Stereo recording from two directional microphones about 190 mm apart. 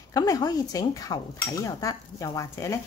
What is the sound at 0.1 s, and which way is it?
Speech, 20° left (ahead or behind).